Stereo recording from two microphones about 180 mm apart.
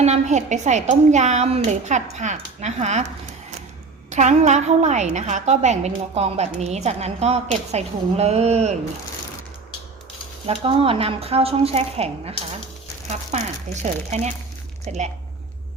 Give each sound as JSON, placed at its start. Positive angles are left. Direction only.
{"t": 0.0, "sound": "a woman's voice", "side_deg": -40}
{"t": 4.1, "sound": "a woman's voice", "side_deg": -40}
{"t": 10.4, "sound": "a woman's voice", "side_deg": -30}
{"t": 13.3, "sound": "a woman's voice", "side_deg": -40}